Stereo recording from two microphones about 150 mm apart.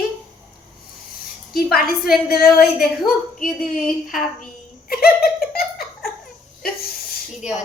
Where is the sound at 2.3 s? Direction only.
90° left.